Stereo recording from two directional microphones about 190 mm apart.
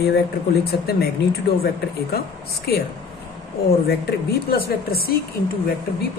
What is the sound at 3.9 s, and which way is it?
Speech, 55° left (ahead or behind).